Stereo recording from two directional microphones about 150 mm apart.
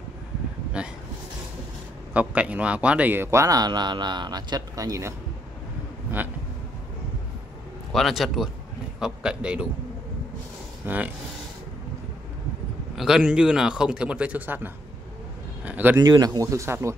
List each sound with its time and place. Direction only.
2.1 s speech: 10° right (ahead or behind)
7.9 s a man's voice: centre (ahead or behind)
10.8 s a man's voice: 15° right (ahead or behind)
12.9 s a man's voice: 5° right (ahead or behind)
16.0 s speech: 25° right (ahead or behind)